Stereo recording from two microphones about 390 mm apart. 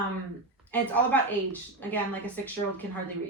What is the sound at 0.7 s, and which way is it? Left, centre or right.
A woman's voice, centre.